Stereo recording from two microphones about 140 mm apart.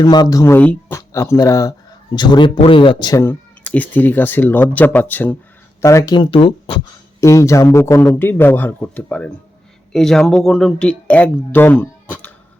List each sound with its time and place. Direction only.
0.0 s speech: 30° left (ahead or behind)
3.2 s speech: 15° left (ahead or behind)
6.3 s speech: 40° left (ahead or behind)
7.2 s speech: 20° left (ahead or behind)